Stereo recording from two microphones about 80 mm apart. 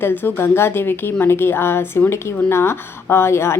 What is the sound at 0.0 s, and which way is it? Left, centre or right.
A woman's voice, left.